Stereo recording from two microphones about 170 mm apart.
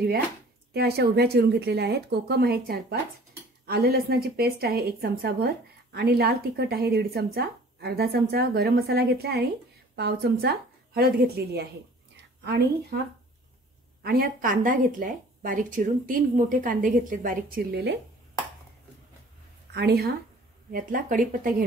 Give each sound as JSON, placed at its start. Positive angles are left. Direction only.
{"t": 0.7, "sound": "a woman's voice", "side_deg": -70}
{"t": 14.0, "sound": "a woman's voice", "side_deg": -60}
{"t": 19.7, "sound": "a woman's voice", "side_deg": -70}
{"t": 20.7, "sound": "a woman's voice", "side_deg": -55}